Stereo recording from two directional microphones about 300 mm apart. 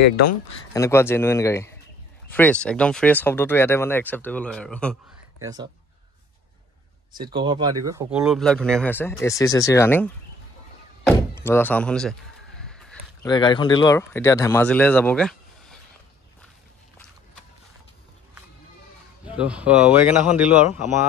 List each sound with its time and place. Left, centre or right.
0.7 s speech: centre
5.4 s speech: centre
7.4 s speech: centre
11.4 s a sound: centre
13.3 s speech: centre
19.3 s speech: centre